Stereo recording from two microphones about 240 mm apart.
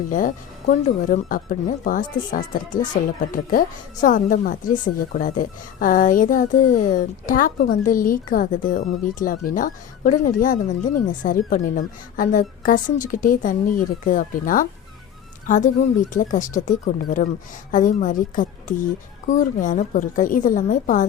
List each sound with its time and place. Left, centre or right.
0.1 s speech: left